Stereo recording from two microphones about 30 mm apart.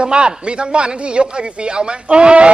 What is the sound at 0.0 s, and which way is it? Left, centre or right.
A man's voice, right.